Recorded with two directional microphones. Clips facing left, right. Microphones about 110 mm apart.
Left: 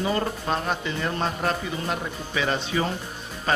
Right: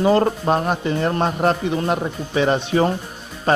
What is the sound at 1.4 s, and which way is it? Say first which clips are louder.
Speech: right 8 dB; 30° right (ahead or behind).